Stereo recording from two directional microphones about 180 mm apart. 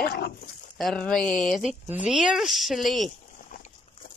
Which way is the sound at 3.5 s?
50° left (ahead or behind).